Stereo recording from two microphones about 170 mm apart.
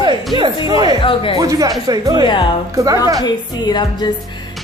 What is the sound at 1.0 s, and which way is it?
Speech, 30° left (ahead or behind).